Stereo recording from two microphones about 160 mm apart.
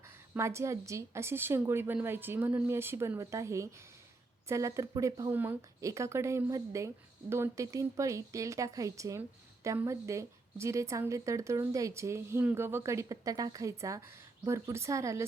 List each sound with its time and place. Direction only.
0.3 s a woman's voice: 15° right (ahead or behind)